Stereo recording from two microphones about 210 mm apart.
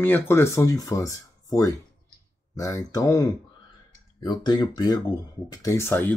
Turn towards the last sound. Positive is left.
turn(degrees=10)  # may be behind; listen again after turning